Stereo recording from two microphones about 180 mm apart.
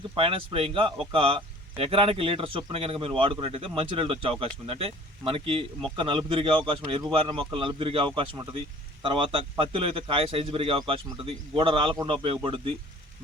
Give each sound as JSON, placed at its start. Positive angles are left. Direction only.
{"t": 0.2, "sound": "a man's voice", "side_deg": -30}